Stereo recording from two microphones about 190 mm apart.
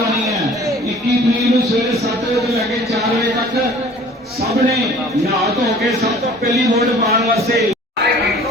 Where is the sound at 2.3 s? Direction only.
Centre (ahead or behind).